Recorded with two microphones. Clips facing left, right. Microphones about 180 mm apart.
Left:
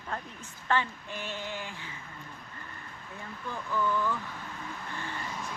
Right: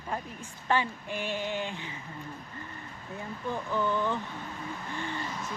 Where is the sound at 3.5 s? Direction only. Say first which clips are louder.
Right 1 dB; 20° right (ahead or behind).